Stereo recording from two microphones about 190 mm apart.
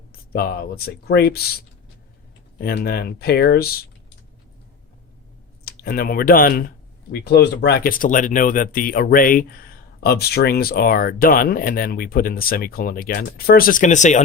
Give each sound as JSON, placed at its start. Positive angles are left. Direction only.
{"t": 0.1, "sound": "speech", "side_deg": 50}
{"t": 5.6, "sound": "speech", "side_deg": 55}